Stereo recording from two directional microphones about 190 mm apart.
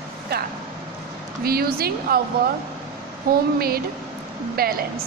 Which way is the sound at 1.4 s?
55° right (ahead or behind).